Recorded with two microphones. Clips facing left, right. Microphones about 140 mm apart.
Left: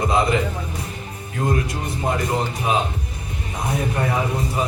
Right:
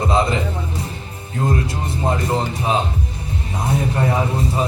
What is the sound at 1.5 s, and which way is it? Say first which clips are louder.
A man's voice: right 1 dB; 30° right (ahead or behind).